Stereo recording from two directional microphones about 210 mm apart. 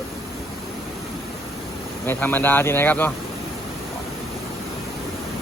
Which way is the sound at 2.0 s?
10° left (ahead or behind).